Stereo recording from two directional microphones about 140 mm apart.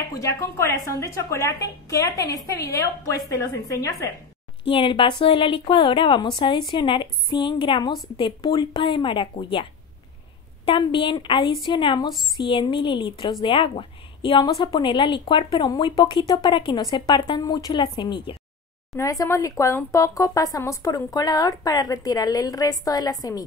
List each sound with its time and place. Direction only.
0.1 s speech: 20° left (ahead or behind)
4.6 s a woman's voice: 40° left (ahead or behind)
18.9 s speech: 25° left (ahead or behind)